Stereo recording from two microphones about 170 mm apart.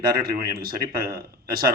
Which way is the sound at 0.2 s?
60° right (ahead or behind).